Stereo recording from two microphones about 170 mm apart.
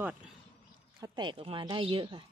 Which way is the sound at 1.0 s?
25° right (ahead or behind).